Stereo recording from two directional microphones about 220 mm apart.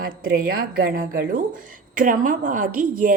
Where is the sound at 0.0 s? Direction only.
45° right (ahead or behind).